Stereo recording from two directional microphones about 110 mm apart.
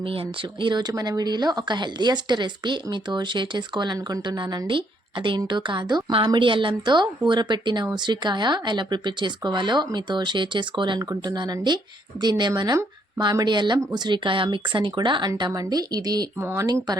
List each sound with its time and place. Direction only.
0.6 s speech: 40° right (ahead or behind)
16.4 s speech: 20° right (ahead or behind)